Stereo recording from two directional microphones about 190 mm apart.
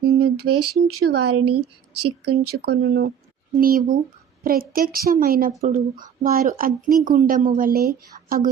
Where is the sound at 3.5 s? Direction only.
50° right (ahead or behind).